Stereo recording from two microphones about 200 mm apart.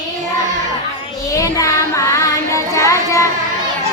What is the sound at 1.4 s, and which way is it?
Child singing, 15° left (ahead or behind).